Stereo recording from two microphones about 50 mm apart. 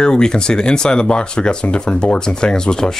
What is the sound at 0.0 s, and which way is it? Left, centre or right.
Speech, centre.